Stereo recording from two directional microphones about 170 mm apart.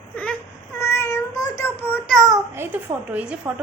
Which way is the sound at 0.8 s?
15° left (ahead or behind).